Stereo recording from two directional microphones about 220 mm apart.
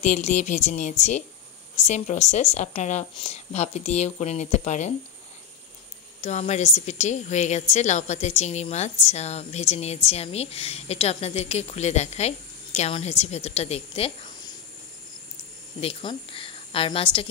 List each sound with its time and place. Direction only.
0.0 s speech: 35° left (ahead or behind)
6.2 s speech: 30° left (ahead or behind)
15.8 s speech: 25° left (ahead or behind)